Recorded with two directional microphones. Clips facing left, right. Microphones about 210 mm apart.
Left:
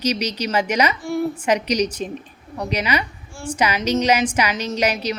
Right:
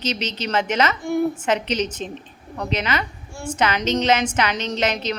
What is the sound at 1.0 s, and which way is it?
Speech, 20° right (ahead or behind).